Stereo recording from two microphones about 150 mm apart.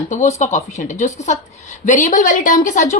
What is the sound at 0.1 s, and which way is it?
A woman's voice, 50° left (ahead or behind).